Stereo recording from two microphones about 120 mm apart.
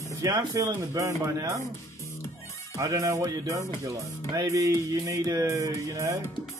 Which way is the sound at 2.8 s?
25° right (ahead or behind).